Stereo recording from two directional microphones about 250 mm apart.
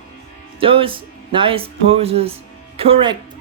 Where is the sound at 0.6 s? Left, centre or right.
Right.